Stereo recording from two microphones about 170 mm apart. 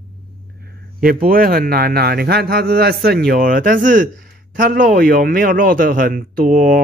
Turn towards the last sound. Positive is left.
turn(degrees=-60)  # may be behind; listen again after turning